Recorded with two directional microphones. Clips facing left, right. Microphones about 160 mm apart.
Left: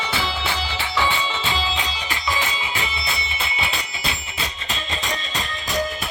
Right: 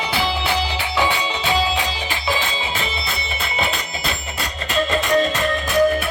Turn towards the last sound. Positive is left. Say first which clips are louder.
# right 9 dB
turn(degrees=-55)  # may be behind; listen again after turning